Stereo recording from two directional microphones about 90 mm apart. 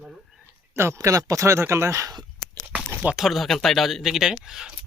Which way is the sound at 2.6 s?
20° right (ahead or behind).